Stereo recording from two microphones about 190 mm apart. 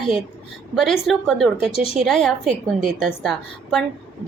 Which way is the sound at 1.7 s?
30° left (ahead or behind).